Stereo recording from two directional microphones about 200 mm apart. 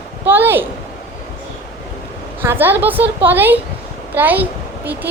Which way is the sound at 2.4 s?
10° right (ahead or behind).